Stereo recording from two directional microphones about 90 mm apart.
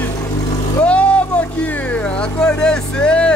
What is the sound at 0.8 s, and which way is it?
Vehicle, 15° left (ahead or behind).